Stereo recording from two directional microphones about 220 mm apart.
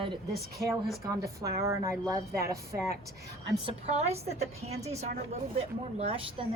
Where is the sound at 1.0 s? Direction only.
15° right (ahead or behind).